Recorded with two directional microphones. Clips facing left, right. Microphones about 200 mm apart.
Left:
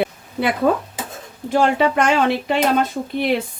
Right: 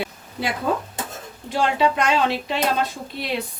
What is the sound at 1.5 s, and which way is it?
Speech, 50° left (ahead or behind).